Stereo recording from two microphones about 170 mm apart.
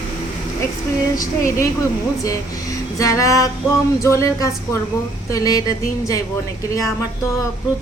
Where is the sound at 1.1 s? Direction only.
20° left (ahead or behind).